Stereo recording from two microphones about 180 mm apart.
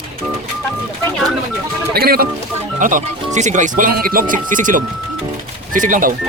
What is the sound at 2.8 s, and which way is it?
Speech, 45° right (ahead or behind).